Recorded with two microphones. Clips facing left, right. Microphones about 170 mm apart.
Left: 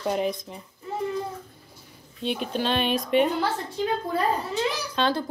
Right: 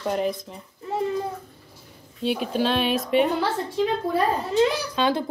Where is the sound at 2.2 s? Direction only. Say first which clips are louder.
Right 3 dB; 5° right (ahead or behind).